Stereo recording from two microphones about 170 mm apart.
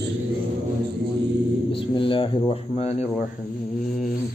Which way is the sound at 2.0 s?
30° left (ahead or behind).